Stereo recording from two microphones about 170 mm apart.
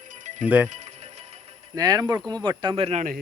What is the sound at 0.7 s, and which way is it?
Music, 40° right (ahead or behind).